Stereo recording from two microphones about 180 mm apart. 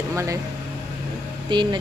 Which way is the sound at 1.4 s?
25° right (ahead or behind).